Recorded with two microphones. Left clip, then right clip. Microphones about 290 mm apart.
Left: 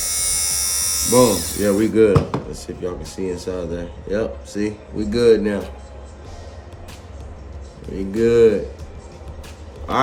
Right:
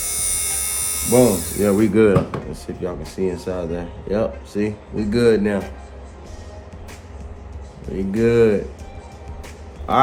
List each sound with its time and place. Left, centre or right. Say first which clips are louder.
0.0 s electric shaver: left 3 dB; centre
1.6 s speech: even; centre
7.9 s speech: left 1 dB; centre